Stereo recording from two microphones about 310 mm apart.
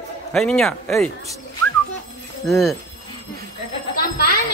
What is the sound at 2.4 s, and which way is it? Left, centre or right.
Speech, centre.